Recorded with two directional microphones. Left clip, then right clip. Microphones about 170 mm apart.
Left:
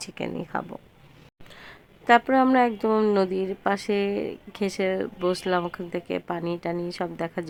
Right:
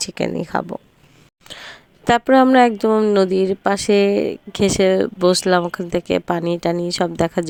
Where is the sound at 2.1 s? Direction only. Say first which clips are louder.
Right 6 dB; 35° right (ahead or behind).